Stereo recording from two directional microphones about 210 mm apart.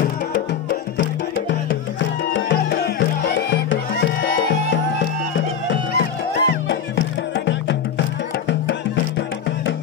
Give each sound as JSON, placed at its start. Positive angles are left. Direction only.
{"t": 1.5, "sound": "music", "side_deg": 60}
{"t": 5.7, "sound": "music", "side_deg": 50}